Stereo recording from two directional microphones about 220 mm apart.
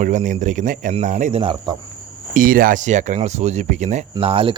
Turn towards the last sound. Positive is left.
turn(degrees=-25)  # may be behind; listen again after turning